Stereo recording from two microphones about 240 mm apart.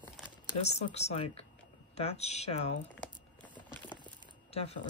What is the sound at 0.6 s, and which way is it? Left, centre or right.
Speech, left.